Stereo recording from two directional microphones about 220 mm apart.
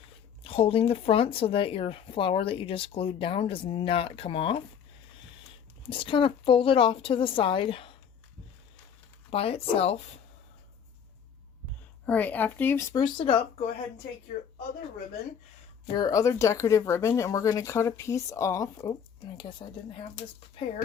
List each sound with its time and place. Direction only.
0.4 s speech: 25° left (ahead or behind)
5.9 s speech: 25° left (ahead or behind)
9.3 s speech: 25° left (ahead or behind)
12.0 s speech: 5° left (ahead or behind); by 13.7 s 25° left (ahead or behind)
16.0 s speech: 15° left (ahead or behind)